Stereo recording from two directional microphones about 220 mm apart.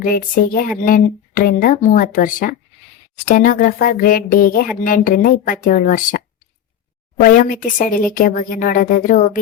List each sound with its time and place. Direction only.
0.0 s speech: 40° left (ahead or behind)